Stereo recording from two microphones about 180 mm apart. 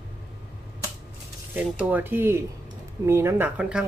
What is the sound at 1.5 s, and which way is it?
Speech, 10° right (ahead or behind).